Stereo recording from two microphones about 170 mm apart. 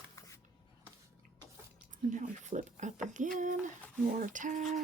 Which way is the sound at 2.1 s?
45° right (ahead or behind).